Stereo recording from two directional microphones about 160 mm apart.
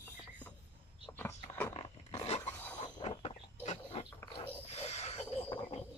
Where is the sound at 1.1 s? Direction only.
15° left (ahead or behind).